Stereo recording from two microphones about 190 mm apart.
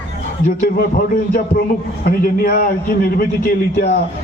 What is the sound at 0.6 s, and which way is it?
A man's voice, 50° left (ahead or behind).